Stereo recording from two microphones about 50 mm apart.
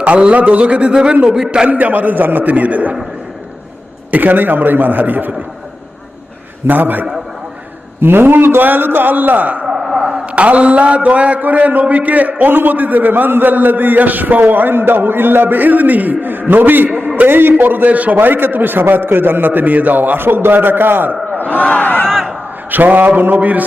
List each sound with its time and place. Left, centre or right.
0.0 s a man's voice: right
4.1 s a man's voice: right
6.7 s a man's voice: right
8.0 s a man's voice: right
21.4 s speech: left
22.7 s a man's voice: right